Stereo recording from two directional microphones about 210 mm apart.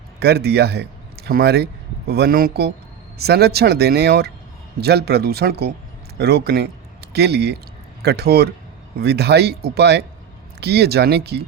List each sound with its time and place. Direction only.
0.2 s a man's voice: 50° right (ahead or behind)